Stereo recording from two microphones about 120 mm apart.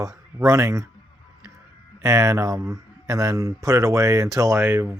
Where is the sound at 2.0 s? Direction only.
25° right (ahead or behind).